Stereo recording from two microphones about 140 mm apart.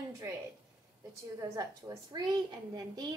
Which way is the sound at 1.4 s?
25° right (ahead or behind).